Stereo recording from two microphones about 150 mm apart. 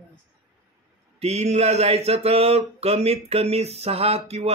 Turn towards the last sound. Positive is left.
turn(degrees=-45)  # may be behind; listen again after turning